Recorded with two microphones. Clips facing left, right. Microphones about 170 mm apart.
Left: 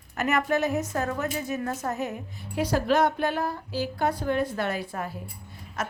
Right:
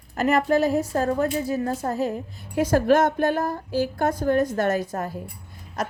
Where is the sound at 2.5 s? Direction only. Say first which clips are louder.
Right 5 dB; 50° right (ahead or behind).